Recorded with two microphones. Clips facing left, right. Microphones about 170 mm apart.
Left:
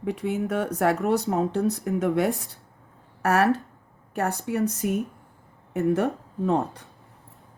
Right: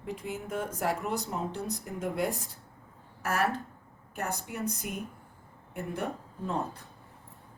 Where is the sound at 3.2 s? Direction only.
70° left (ahead or behind).